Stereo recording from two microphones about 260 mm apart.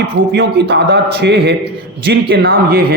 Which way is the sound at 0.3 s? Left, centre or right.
Right.